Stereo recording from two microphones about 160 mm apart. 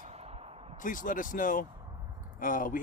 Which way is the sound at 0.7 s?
55° left (ahead or behind).